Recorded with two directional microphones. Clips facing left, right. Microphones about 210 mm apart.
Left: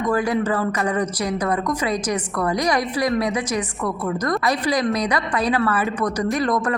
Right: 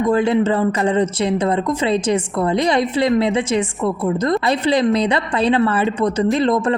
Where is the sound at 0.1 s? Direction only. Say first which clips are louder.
Right 4 dB; 25° right (ahead or behind).